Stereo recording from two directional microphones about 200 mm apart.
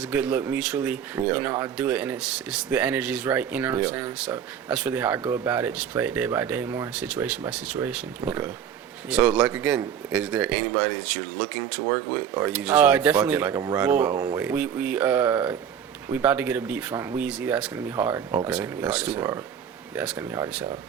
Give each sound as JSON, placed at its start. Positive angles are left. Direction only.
{"t": 0.1, "sound": "a man's voice", "side_deg": -5}